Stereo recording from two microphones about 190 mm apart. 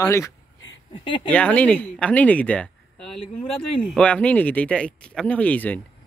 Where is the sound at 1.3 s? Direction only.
5° left (ahead or behind).